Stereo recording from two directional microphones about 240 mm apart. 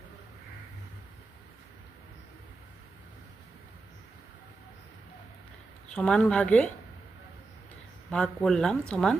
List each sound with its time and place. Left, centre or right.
5.9 s speech: centre
8.1 s speech: centre